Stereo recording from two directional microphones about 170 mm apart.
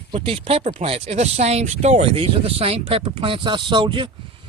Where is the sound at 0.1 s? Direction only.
35° right (ahead or behind).